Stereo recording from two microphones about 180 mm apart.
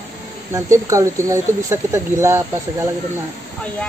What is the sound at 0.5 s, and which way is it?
Speech, 15° right (ahead or behind).